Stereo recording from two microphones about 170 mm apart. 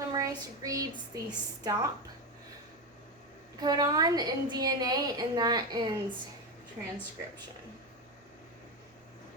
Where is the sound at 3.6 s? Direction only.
20° right (ahead or behind).